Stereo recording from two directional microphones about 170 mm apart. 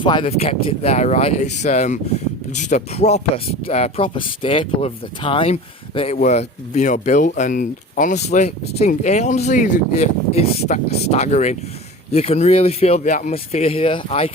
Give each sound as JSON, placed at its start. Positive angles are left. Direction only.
{"t": 0.0, "sound": "speech", "side_deg": 30}